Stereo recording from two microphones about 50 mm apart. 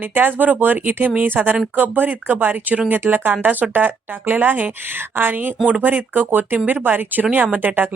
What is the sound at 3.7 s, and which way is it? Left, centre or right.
Speech, right.